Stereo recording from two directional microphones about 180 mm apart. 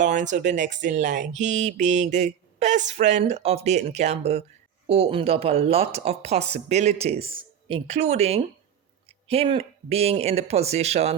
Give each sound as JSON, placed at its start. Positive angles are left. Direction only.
{"t": 0.0, "sound": "speech", "side_deg": -45}